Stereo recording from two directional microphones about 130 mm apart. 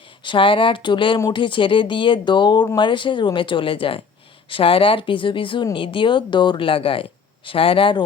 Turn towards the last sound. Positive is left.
turn(degrees=40)  # may be behind; listen again after turning